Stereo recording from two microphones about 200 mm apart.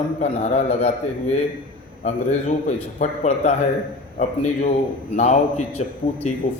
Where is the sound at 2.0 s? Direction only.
35° left (ahead or behind).